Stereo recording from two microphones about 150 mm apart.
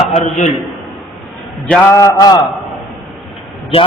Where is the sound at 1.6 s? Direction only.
5° left (ahead or behind).